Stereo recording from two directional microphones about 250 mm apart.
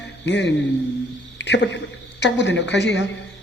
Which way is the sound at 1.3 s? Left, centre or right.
Left.